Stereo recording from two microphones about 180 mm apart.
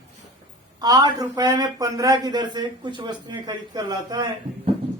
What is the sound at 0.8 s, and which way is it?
Speech, 20° right (ahead or behind).